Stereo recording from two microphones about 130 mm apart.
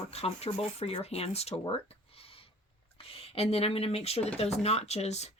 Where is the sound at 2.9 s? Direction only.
50° left (ahead or behind).